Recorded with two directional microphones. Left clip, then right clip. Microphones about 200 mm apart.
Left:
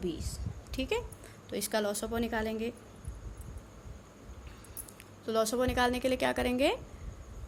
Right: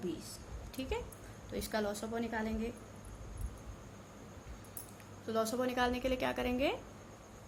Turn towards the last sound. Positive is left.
turn(degrees=40)  # may be behind; listen again after turning